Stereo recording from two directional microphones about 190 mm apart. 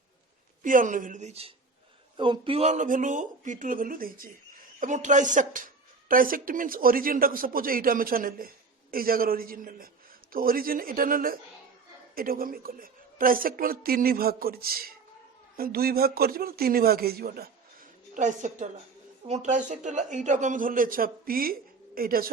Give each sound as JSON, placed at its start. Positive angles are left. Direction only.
{"t": 0.6, "sound": "a man's voice", "side_deg": -45}
{"t": 18.1, "sound": "a man's voice", "side_deg": -40}